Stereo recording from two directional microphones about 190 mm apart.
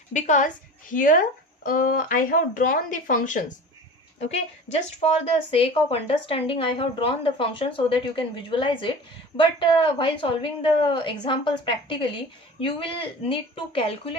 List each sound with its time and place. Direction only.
0.1 s a woman's voice: 40° left (ahead or behind)
4.3 s speech: 35° left (ahead or behind)